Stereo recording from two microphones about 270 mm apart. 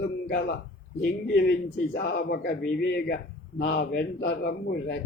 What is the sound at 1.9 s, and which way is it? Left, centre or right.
A man's voice, left.